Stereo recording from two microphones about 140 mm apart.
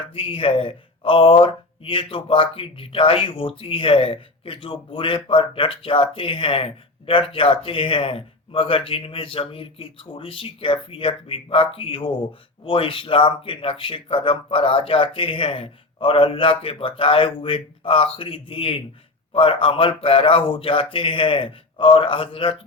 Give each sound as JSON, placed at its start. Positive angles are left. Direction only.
{"t": 0.0, "sound": "a man's voice", "side_deg": 40}